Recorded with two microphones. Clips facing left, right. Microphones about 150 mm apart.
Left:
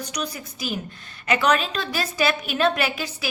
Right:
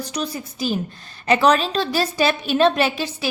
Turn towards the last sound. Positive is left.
turn(degrees=-30)  # may be behind; listen again after turning